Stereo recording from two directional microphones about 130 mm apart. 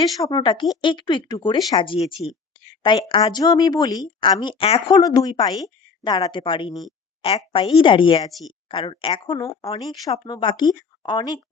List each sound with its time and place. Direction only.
0.2 s speech: 30° left (ahead or behind)
4.9 s a woman's voice: 30° left (ahead or behind)
8.3 s speech: centre (ahead or behind)
8.7 s speech: 45° left (ahead or behind)
9.4 s a woman's voice: 25° left (ahead or behind)